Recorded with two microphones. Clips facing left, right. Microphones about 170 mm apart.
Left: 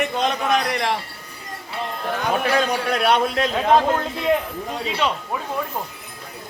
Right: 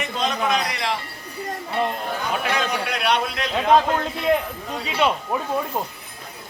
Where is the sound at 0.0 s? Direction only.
55° left (ahead or behind).